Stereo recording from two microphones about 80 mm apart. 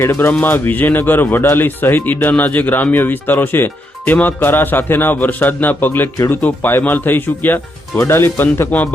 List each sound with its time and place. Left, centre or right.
0.0 s speech: left